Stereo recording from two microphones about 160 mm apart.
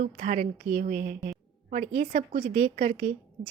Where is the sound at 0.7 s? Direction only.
65° right (ahead or behind).